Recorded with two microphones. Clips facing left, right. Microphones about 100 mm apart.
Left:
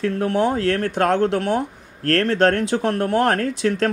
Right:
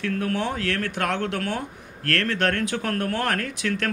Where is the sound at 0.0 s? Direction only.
25° left (ahead or behind).